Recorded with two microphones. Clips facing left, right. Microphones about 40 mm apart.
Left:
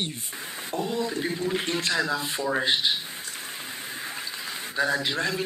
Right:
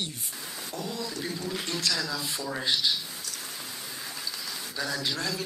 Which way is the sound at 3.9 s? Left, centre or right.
Left.